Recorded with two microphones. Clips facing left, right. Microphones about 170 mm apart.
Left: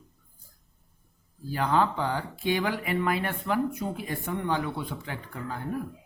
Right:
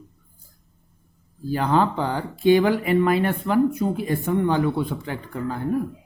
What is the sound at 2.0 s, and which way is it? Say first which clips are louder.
Speech: right 7 dB; 30° right (ahead or behind).